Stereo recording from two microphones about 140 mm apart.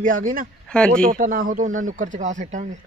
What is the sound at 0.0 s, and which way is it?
Speech, 75° right (ahead or behind).